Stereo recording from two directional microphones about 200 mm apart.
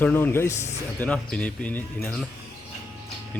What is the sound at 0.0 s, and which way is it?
Speech, 10° left (ahead or behind).